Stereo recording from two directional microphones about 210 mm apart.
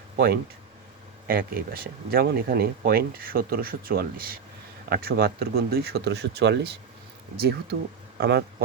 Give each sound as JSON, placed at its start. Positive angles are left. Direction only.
{"t": 1.3, "sound": "speech", "side_deg": -45}